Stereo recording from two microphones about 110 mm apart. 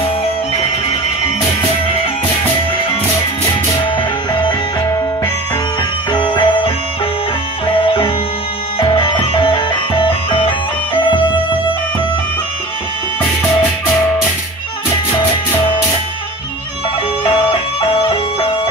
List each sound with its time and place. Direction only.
3.9 s music: 45° left (ahead or behind)
6.1 s music: 45° left (ahead or behind)
17.2 s music: 55° left (ahead or behind)